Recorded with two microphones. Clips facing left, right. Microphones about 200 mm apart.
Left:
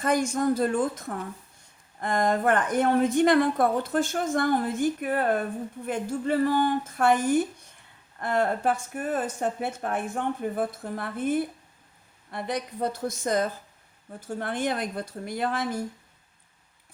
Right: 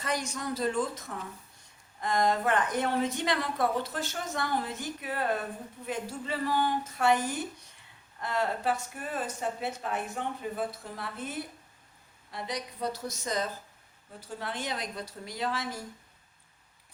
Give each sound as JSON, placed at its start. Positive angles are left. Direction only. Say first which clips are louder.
{"t": 0.0, "sound": "a woman's voice", "louder": "left 9 dB", "side_deg": 50}